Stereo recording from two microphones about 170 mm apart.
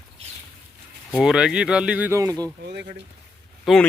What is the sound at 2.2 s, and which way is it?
Speech, 20° right (ahead or behind).